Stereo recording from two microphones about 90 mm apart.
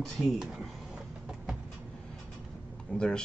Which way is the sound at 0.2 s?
5° right (ahead or behind).